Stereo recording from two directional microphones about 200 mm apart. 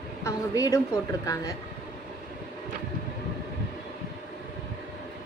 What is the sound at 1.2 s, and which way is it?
Speech, 15° left (ahead or behind).